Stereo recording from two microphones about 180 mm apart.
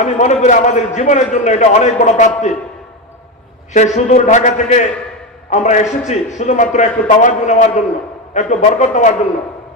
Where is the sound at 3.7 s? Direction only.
40° left (ahead or behind).